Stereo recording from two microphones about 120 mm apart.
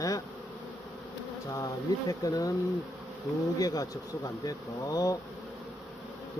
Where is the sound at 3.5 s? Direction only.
30° left (ahead or behind).